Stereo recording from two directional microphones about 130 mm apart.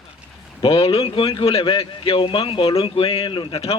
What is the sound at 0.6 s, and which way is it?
Speech, 45° left (ahead or behind).